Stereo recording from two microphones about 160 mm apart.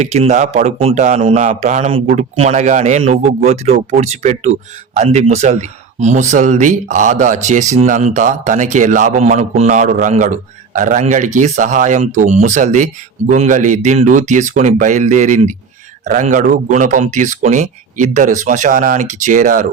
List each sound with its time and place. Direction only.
0.0 s a man's voice: 45° right (ahead or behind)
1.9 s a man's voice: 40° right (ahead or behind); by 19.6 s 55° right (ahead or behind)